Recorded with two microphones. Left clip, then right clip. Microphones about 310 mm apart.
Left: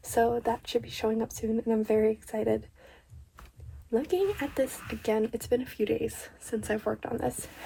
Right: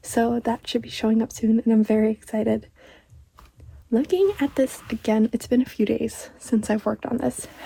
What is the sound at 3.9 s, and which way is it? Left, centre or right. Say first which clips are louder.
Speech: right 7 dB; right.